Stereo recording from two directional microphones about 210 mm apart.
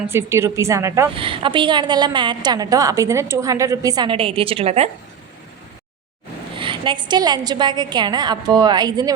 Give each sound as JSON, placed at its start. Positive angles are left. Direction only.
{"t": 0.1, "sound": "a woman's voice", "side_deg": -10}
{"t": 1.1, "sound": "a woman's voice", "side_deg": -25}
{"t": 6.6, "sound": "a woman's voice", "side_deg": -25}